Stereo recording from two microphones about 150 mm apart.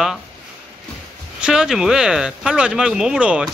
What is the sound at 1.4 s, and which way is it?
Speech, 5° right (ahead or behind).